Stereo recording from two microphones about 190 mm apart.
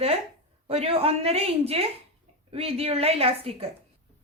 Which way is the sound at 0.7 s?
30° right (ahead or behind).